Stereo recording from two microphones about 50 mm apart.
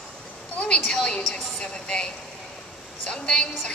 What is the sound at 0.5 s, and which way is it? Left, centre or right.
A woman's voice, left.